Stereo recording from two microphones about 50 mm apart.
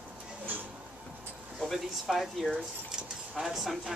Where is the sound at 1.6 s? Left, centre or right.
Centre.